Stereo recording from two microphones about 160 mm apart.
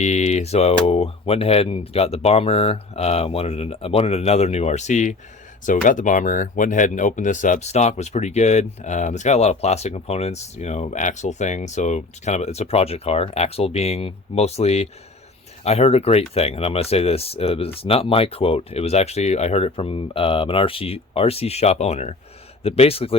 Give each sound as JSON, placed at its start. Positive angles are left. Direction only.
{"t": 0.0, "sound": "speech", "side_deg": 45}